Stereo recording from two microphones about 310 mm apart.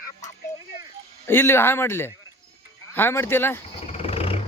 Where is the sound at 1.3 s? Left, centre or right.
Centre.